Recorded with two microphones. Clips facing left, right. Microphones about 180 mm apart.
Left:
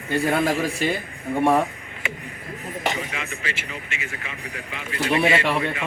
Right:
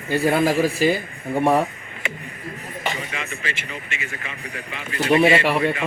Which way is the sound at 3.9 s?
55° right (ahead or behind).